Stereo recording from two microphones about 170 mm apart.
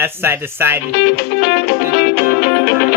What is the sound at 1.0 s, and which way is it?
Music, 70° left (ahead or behind).